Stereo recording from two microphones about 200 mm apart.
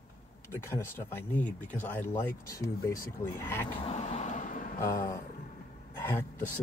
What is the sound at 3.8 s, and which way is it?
Vehicle, 30° left (ahead or behind).